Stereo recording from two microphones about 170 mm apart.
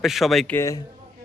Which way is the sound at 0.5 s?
20° left (ahead or behind).